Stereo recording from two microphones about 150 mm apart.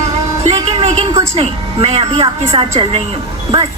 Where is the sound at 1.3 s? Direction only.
45° right (ahead or behind).